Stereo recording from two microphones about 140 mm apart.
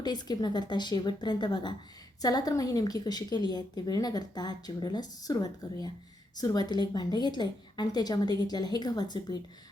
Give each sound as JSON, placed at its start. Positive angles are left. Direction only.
{"t": 0.0, "sound": "a woman's voice", "side_deg": 30}